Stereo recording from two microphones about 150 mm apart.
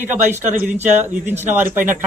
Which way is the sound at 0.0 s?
15° right (ahead or behind).